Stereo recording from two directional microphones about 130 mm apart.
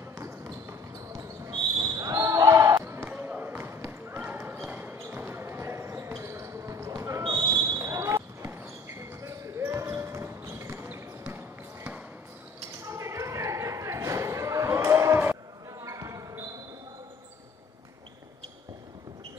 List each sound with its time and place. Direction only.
0.1 s basketball bounce: 20° right (ahead or behind)
12.8 s a sound: 20° right (ahead or behind)
15.8 s basketball bounce: 25° right (ahead or behind)